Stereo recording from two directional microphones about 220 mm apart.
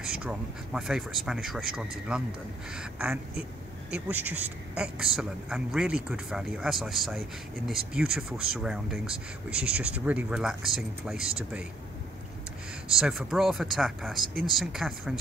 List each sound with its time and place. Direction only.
0.0 s speech: 5° right (ahead or behind)
12.9 s speech: centre (ahead or behind)